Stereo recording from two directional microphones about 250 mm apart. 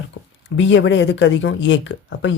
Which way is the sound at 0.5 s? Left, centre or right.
Left.